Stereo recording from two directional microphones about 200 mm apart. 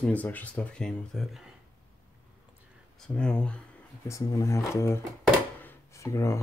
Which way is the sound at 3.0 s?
5° left (ahead or behind).